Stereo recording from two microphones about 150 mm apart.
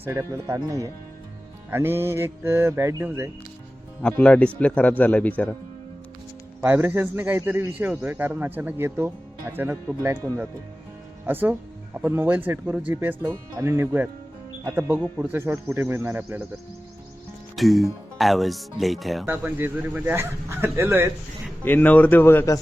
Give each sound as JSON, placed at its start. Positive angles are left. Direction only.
{"t": 0.0, "sound": "a man's voice", "side_deg": -15}
{"t": 4.0, "sound": "speech", "side_deg": 10}
{"t": 6.6, "sound": "a man's voice", "side_deg": -15}
{"t": 17.6, "sound": "speech", "side_deg": 0}
{"t": 19.2, "sound": "a man's voice", "side_deg": -15}
{"t": 21.6, "sound": "speech", "side_deg": 10}